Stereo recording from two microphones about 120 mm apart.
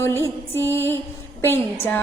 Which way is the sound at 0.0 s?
20° left (ahead or behind).